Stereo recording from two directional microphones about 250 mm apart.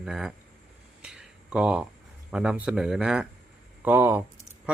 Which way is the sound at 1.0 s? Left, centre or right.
Centre.